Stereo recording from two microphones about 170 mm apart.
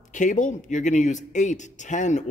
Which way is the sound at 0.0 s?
50° left (ahead or behind).